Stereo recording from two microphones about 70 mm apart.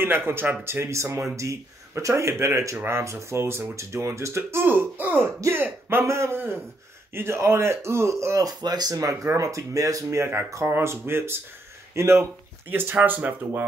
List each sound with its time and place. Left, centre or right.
0.0 s speech: right
8.5 s speech: right
12.7 s speech: right